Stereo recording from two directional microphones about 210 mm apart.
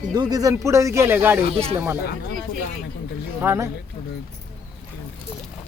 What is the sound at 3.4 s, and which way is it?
Speech, 10° right (ahead or behind).